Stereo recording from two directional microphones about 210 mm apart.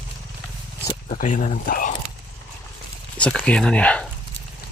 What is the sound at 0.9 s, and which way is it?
Speech, 35° left (ahead or behind).